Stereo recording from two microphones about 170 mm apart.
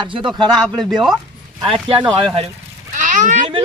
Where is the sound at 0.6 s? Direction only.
Centre (ahead or behind).